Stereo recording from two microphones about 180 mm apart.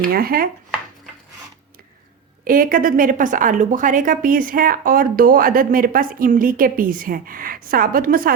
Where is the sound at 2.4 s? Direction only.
50° right (ahead or behind).